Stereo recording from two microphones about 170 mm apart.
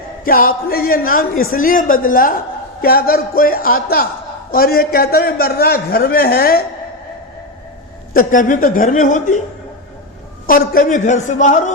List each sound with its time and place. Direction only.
0.3 s a man's voice: 60° left (ahead or behind)
8.1 s a man's voice: 50° left (ahead or behind)
10.4 s a man's voice: 60° left (ahead or behind)